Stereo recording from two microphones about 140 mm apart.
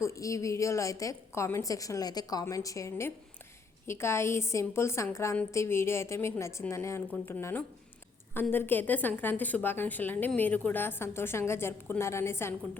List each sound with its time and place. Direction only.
0.0 s a woman's voice: 20° left (ahead or behind)